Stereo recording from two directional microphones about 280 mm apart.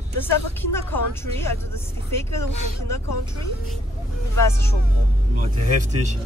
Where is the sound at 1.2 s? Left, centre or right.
Centre.